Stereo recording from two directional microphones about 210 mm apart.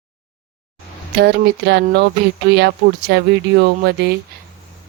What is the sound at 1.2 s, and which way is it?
Speech, 50° right (ahead or behind).